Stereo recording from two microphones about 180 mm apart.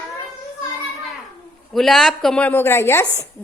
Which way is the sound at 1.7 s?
Centre (ahead or behind).